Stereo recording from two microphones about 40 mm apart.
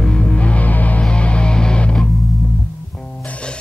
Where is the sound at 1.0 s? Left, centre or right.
Left.